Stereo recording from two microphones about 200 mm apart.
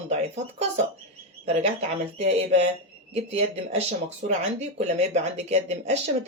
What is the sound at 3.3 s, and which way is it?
Speech, 30° right (ahead or behind).